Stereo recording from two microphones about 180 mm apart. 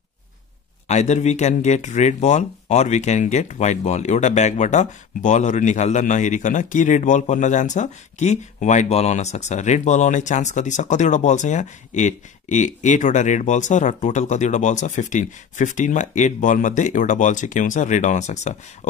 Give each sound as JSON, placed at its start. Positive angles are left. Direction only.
{"t": 0.8, "sound": "speech", "side_deg": 40}